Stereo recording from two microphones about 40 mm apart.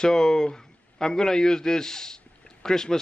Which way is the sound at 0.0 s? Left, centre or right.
Centre.